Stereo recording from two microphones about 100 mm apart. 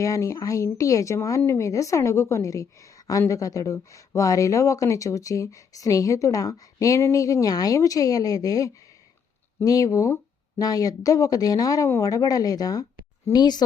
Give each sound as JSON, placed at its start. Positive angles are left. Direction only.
{"t": 0.0, "sound": "a woman's voice", "side_deg": 35}